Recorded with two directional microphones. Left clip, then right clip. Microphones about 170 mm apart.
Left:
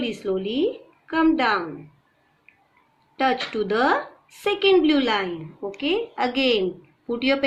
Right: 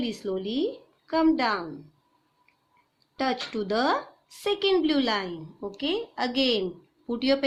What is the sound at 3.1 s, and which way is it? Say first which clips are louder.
A woman's voice: left 6 dB; 90° right.